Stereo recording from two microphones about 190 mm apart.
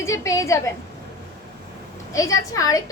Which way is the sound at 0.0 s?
15° left (ahead or behind).